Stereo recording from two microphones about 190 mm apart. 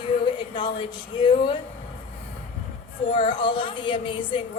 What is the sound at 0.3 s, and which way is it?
Speech, 25° left (ahead or behind).